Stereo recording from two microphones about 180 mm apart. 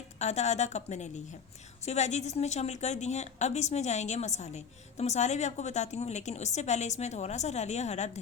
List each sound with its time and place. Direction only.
0.2 s a woman's voice: 40° left (ahead or behind)